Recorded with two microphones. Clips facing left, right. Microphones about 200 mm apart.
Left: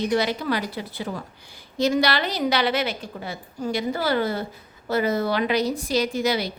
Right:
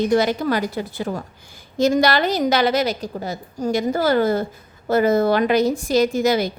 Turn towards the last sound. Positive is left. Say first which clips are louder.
# right 6 dB
turn(degrees=-45)  # may be behind; listen again after turning